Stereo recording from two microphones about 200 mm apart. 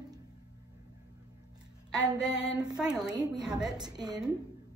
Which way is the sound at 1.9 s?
20° right (ahead or behind).